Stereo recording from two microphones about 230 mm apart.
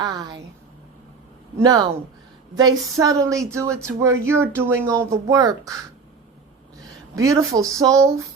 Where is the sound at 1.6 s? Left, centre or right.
Centre.